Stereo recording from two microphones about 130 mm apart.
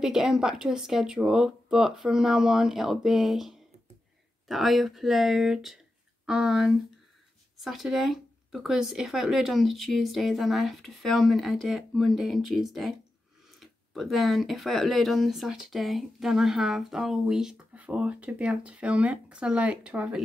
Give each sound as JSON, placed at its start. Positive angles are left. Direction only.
{"t": 0.0, "sound": "speech", "side_deg": -5}